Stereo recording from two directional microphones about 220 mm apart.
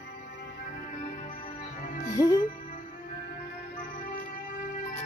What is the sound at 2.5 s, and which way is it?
Music, 35° left (ahead or behind).